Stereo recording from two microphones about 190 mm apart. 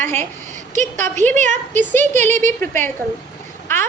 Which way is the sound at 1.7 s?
10° left (ahead or behind).